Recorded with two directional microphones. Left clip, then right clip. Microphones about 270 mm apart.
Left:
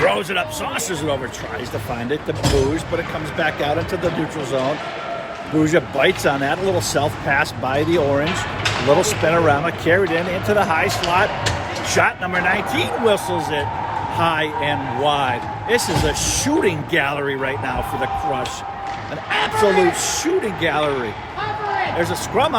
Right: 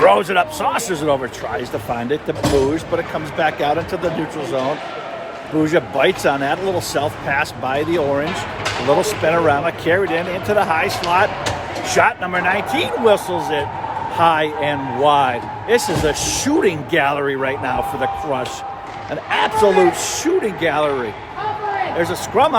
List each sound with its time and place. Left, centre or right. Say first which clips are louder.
0.0 s a man's voice: right 6 dB; centre
3.3 s a man's voice: right 3 dB; centre
5.6 s a man's voice: right 1 dB; centre
21.9 s a man's voice: right 2 dB; centre